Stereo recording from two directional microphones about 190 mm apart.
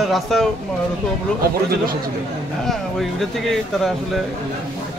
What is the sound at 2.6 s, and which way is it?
Speech, centre (ahead or behind).